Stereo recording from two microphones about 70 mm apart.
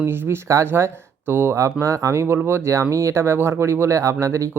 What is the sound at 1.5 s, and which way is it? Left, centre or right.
Speech, right.